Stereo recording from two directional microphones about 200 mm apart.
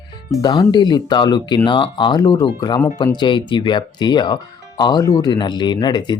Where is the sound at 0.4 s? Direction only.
20° left (ahead or behind).